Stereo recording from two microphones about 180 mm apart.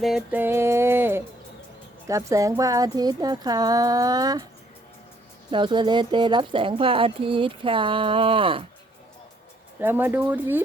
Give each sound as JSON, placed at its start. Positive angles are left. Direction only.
{"t": 0.0, "sound": "music", "side_deg": -5}
{"t": 2.0, "sound": "speech", "side_deg": -20}
{"t": 5.5, "sound": "speech", "side_deg": -25}
{"t": 9.8, "sound": "music", "side_deg": -10}